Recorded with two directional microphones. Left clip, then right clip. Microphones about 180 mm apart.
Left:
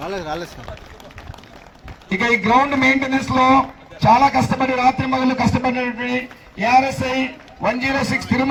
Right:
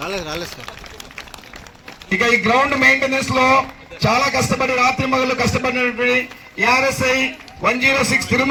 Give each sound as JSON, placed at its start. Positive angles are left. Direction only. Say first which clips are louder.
{"t": 0.0, "sound": "boat", "louder": "right 1 dB", "side_deg": 65}
{"t": 2.0, "sound": "a man's voice", "louder": "right 2 dB", "side_deg": 55}